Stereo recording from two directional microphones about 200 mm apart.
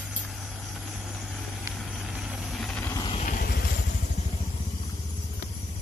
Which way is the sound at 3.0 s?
25° left (ahead or behind).